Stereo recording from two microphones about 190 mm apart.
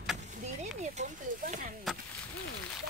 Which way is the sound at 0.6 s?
40° right (ahead or behind).